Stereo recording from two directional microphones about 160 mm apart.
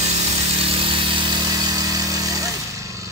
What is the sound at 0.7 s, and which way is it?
Vehicle, 30° right (ahead or behind).